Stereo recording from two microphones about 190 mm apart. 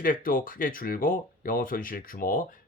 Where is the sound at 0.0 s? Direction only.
50° left (ahead or behind).